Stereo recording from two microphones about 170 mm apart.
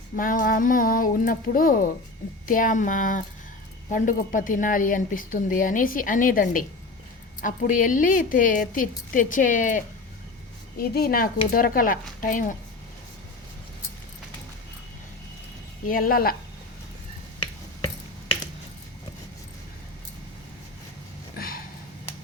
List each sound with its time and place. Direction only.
0.2 s a woman's voice: 55° left (ahead or behind)
10.8 s speech: 65° left (ahead or behind)
15.9 s speech: 55° left (ahead or behind)
21.3 s a sound: 60° left (ahead or behind)